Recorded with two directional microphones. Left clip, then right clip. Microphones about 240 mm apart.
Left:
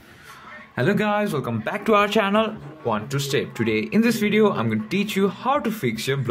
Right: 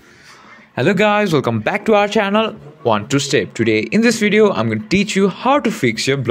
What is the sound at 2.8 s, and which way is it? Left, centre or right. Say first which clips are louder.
Speech: right 9 dB; right.